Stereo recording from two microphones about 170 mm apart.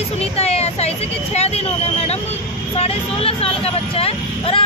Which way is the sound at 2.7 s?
35° left (ahead or behind).